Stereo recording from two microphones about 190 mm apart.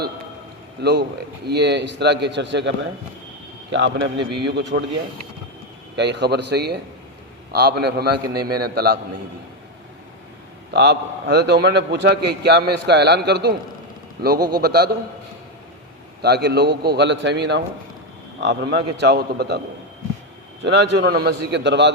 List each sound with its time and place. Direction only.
0.8 s a man's voice: 60° right (ahead or behind)
6.0 s a man's voice: 65° right (ahead or behind)
10.7 s a man's voice: 60° right (ahead or behind)
16.2 s a man's voice: 60° right (ahead or behind)
20.7 s a man's voice: 65° right (ahead or behind)